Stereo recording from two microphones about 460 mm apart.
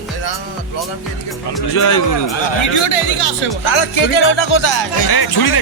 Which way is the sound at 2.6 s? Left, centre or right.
Left.